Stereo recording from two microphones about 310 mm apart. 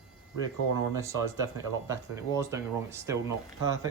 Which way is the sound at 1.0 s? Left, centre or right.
Centre.